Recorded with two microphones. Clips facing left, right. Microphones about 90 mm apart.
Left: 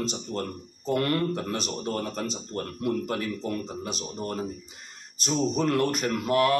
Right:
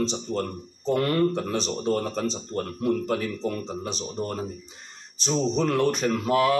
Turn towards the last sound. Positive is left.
turn(degrees=0)  # may be behind; listen again after turning